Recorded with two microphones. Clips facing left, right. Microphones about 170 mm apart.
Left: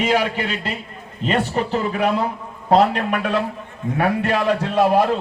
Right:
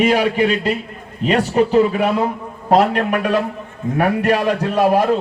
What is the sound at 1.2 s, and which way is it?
Speech, 10° right (ahead or behind).